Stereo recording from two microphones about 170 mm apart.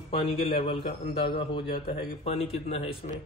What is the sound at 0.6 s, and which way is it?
A man's voice, 35° left (ahead or behind).